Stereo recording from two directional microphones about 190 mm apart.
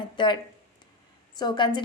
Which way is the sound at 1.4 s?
25° left (ahead or behind).